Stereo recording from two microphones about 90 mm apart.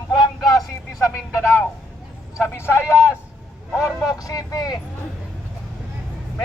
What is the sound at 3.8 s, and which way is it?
Speech, 40° left (ahead or behind).